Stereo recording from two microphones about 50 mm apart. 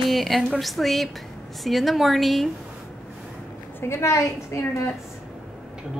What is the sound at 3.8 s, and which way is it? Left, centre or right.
Speech, left.